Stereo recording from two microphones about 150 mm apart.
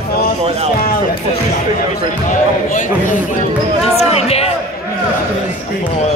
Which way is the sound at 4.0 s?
45° left (ahead or behind).